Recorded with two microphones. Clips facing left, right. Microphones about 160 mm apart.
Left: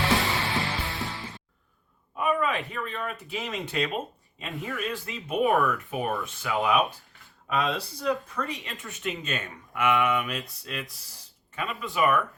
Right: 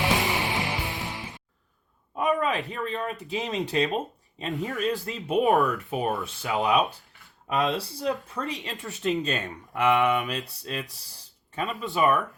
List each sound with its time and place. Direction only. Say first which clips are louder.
0.0 s music: even; 15° right (ahead or behind)
2.1 s speech: right 1 dB; 35° right (ahead or behind)